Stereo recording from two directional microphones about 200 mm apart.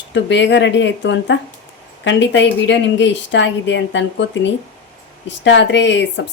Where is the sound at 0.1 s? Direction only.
65° left (ahead or behind).